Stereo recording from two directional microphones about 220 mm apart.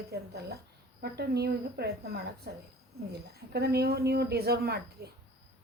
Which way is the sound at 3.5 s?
45° right (ahead or behind).